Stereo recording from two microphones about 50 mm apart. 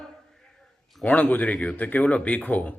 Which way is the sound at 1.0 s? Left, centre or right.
Left.